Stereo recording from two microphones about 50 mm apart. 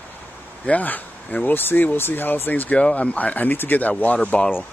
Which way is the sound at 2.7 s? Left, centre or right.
Left.